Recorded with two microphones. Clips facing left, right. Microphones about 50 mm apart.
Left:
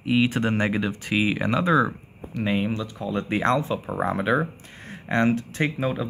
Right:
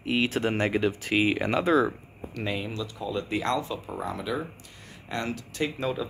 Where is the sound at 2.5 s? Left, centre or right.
Left.